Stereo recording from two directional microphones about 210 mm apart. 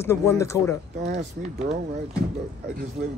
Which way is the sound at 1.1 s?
30° right (ahead or behind).